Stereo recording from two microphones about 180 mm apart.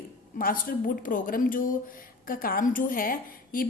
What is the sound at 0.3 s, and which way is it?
A woman's voice, 50° left (ahead or behind).